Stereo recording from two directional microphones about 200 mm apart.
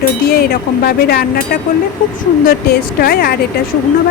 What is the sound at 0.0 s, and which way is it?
A woman's voice, 50° left (ahead or behind).